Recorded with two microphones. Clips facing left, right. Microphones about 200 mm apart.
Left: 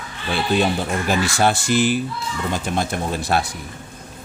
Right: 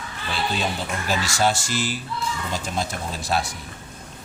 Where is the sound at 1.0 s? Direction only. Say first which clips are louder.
Left 3 dB; 55° left (ahead or behind).